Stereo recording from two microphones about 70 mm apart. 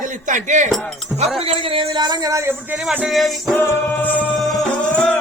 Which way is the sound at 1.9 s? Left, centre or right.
Right.